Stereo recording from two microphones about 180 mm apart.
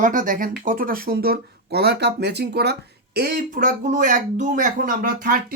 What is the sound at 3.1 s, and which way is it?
Speech, 55° right (ahead or behind).